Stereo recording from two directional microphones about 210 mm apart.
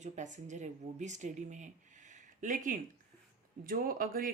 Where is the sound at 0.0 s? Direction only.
35° right (ahead or behind).